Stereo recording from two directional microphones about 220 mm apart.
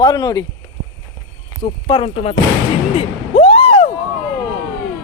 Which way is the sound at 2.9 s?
25° left (ahead or behind).